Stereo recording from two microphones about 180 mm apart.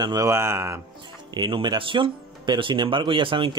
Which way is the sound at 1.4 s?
25° right (ahead or behind).